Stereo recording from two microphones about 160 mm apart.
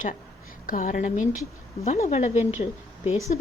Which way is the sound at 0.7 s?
55° left (ahead or behind).